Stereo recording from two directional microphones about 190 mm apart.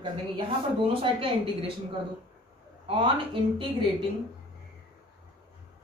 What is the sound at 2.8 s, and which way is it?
Speech, 30° right (ahead or behind).